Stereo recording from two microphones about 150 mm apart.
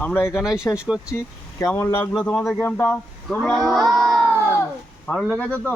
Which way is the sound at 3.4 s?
Centre (ahead or behind).